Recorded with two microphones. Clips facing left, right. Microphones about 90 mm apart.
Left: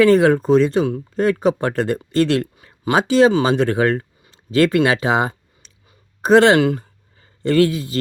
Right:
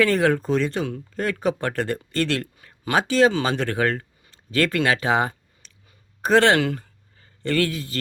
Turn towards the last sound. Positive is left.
turn(degrees=15)  # may be behind; listen again after turning